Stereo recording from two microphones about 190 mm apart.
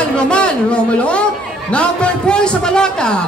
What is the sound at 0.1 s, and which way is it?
A man's voice, 5° left (ahead or behind).